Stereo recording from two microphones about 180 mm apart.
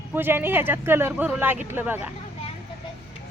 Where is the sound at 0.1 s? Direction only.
10° right (ahead or behind).